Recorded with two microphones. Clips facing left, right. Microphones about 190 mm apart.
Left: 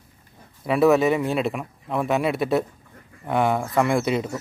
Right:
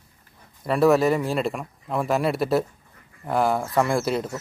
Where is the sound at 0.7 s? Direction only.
Centre (ahead or behind).